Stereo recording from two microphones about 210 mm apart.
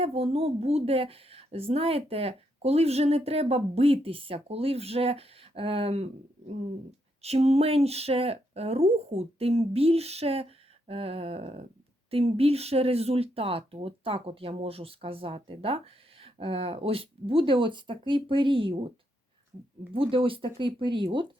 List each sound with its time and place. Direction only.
0.0 s speech: 30° right (ahead or behind)
7.2 s speech: 30° right (ahead or behind)
19.9 s speech: 25° right (ahead or behind)